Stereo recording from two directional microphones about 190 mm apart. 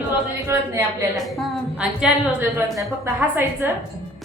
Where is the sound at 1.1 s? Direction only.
Centre (ahead or behind).